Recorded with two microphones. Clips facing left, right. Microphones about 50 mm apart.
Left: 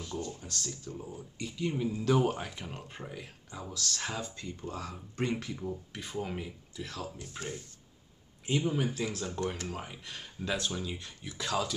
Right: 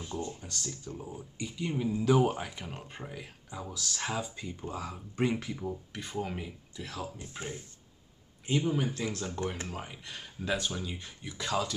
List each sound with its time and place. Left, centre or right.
0.0 s speech: right
0.4 s speech: centre
7.2 s speech: right
8.5 s speech: centre